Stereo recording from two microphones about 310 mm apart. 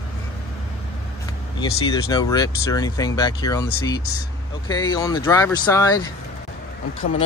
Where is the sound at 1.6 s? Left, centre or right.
Centre.